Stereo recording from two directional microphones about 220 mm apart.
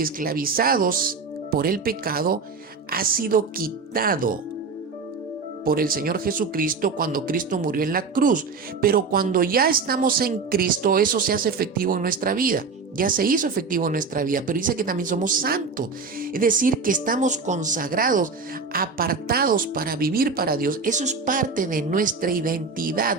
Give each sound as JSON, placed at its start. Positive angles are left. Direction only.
{"t": 0.0, "sound": "speech", "side_deg": -40}
{"t": 5.6, "sound": "speech", "side_deg": -40}